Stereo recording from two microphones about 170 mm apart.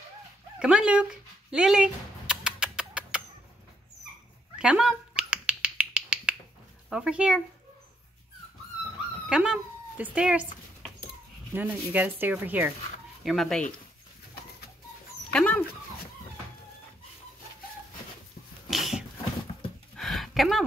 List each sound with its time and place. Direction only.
0.6 s speech: 5° right (ahead or behind)
1.5 s rodents: 5° right (ahead or behind)
4.6 s finger snapping: 5° right (ahead or behind)
6.9 s speech: 5° right (ahead or behind)
9.3 s speech: 5° right (ahead or behind)
15.3 s speech: 10° left (ahead or behind)
18.7 s dog: centre (ahead or behind)
20.0 s a sound: centre (ahead or behind)